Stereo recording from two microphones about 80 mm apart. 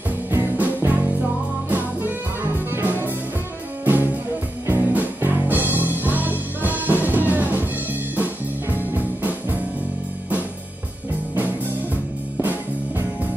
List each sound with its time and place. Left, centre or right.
0.3 s music: right